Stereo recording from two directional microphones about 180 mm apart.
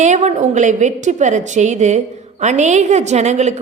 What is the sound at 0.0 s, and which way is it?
A woman's voice, 40° right (ahead or behind).